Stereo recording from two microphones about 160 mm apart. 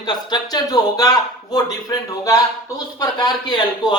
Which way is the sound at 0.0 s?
25° left (ahead or behind).